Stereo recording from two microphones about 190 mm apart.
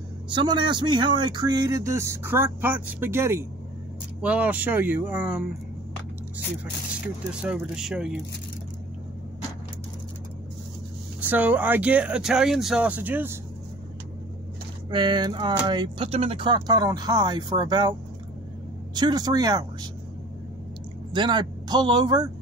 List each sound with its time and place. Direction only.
0.3 s speech: 25° right (ahead or behind); by 5.4 s 10° right (ahead or behind)
7.4 s speech: 5° right (ahead or behind)
11.2 s speech: 10° right (ahead or behind)
14.9 s speech: 25° right (ahead or behind)
18.9 s speech: 20° right (ahead or behind)
21.1 s speech: 25° right (ahead or behind)